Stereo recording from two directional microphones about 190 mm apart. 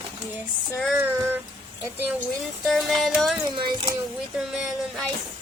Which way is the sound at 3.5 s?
25° right (ahead or behind).